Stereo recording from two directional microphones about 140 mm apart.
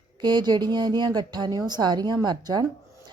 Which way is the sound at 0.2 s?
30° right (ahead or behind).